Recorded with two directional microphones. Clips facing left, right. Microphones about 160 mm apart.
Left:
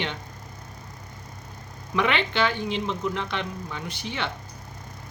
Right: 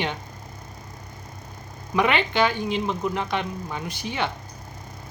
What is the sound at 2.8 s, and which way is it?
Speech, 45° right (ahead or behind).